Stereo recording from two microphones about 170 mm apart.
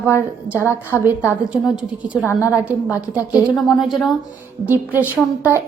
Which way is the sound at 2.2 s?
15° left (ahead or behind).